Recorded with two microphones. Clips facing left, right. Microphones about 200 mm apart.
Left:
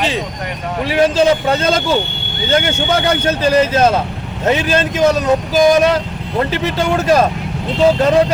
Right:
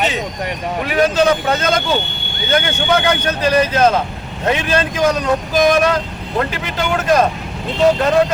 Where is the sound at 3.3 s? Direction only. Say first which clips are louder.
Left 2 dB; 25° left (ahead or behind).